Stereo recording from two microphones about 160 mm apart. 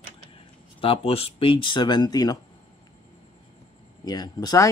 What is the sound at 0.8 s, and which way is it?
Speech, 35° left (ahead or behind).